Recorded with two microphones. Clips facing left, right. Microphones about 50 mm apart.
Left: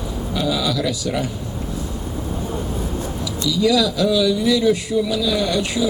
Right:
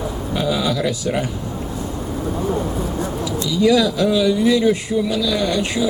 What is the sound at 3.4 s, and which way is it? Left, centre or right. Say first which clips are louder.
Speech: right 2 dB; right.